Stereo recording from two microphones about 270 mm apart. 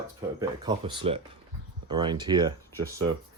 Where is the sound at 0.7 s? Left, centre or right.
Centre.